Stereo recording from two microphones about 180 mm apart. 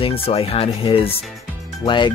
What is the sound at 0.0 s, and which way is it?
Speech, 30° left (ahead or behind).